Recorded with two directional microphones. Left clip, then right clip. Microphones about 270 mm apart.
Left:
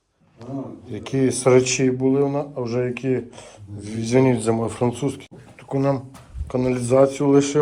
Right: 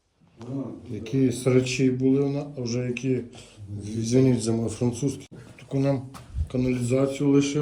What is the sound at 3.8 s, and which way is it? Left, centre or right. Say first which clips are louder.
Speech: left 3 dB; centre.